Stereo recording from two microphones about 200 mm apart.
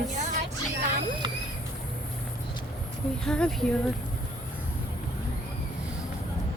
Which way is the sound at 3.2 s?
5° left (ahead or behind).